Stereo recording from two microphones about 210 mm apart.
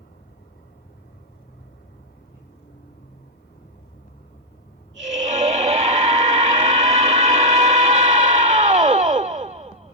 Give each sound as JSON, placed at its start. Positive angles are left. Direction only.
{"t": 5.2, "sound": "music", "side_deg": -35}